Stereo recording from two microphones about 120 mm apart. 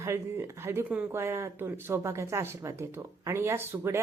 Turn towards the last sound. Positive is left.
turn(degrees=-20)  # may be behind; listen again after turning